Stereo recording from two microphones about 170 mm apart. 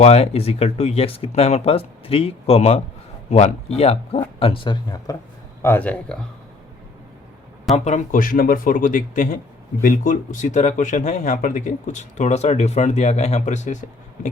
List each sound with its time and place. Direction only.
0.0 s a man's voice: 40° left (ahead or behind)
5.6 s speech: 10° left (ahead or behind)
7.9 s speech: 50° left (ahead or behind)